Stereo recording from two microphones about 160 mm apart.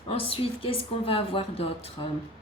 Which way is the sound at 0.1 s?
35° left (ahead or behind).